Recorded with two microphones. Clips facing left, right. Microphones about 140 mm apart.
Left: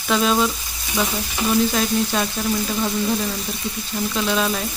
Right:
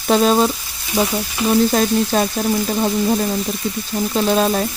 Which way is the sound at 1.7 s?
40° right (ahead or behind).